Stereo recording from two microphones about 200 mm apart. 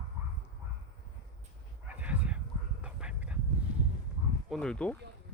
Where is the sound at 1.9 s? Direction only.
5° right (ahead or behind).